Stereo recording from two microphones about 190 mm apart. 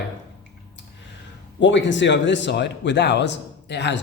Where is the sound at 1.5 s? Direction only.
75° left (ahead or behind).